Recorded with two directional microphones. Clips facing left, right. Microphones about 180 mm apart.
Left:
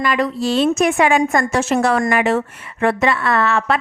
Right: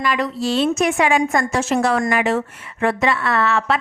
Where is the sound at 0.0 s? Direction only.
50° left (ahead or behind).